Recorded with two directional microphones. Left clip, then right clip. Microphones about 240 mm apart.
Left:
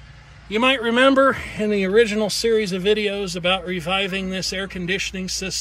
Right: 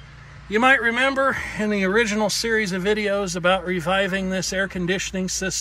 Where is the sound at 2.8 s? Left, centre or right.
Centre.